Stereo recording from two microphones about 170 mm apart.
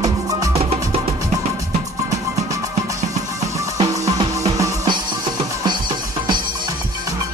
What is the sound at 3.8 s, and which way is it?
Music, 20° right (ahead or behind).